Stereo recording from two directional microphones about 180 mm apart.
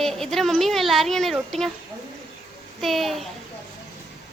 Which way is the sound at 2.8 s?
Centre (ahead or behind).